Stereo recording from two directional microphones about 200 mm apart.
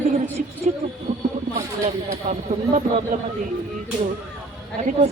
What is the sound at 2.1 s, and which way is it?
Speech, 35° right (ahead or behind).